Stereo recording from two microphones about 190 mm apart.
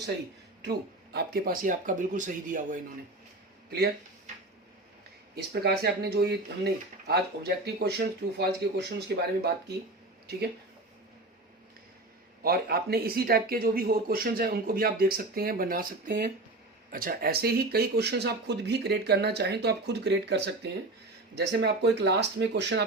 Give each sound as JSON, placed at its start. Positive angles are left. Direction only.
{"t": 0.6, "sound": "a man's voice", "side_deg": -55}
{"t": 5.5, "sound": "speech", "side_deg": -55}
{"t": 12.4, "sound": "a man's voice", "side_deg": -55}